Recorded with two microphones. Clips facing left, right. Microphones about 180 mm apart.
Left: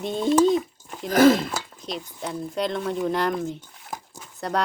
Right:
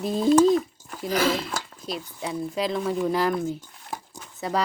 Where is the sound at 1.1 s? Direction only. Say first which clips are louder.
Left 7 dB; 50° left (ahead or behind).